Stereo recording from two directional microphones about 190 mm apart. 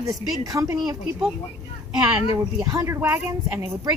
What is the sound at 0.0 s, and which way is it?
Speech, 15° right (ahead or behind).